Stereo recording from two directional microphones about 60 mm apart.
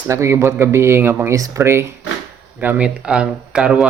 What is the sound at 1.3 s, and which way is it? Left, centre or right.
Speech, right.